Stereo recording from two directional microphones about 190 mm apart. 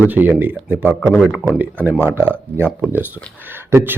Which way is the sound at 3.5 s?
10° right (ahead or behind).